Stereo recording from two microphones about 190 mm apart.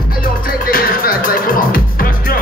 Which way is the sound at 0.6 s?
50° left (ahead or behind).